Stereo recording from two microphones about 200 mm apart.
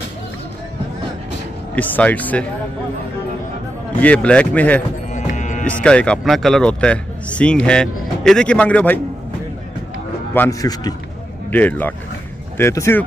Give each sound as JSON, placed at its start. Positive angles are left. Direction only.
{"t": 1.8, "sound": "speech", "side_deg": 10}
{"t": 4.0, "sound": "speech", "side_deg": 5}
{"t": 5.1, "sound": "music", "side_deg": 35}
{"t": 5.7, "sound": "speech", "side_deg": 5}
{"t": 10.3, "sound": "a man's voice", "side_deg": 15}
{"t": 11.5, "sound": "speech", "side_deg": 10}